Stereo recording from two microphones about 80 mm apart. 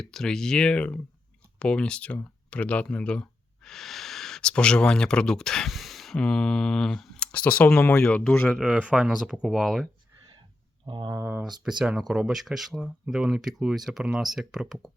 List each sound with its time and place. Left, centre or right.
0.0 s mantra: centre
1.5 s speech: centre
6.1 s mantra: centre
7.3 s speech: centre
7.9 s mantra: centre
8.5 s speech: centre
10.8 s speech: right
11.6 s speech: centre